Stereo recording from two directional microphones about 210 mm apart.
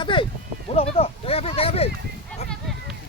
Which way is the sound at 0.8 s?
30° left (ahead or behind).